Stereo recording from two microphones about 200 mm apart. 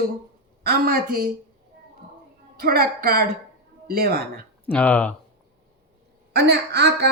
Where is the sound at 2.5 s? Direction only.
50° right (ahead or behind).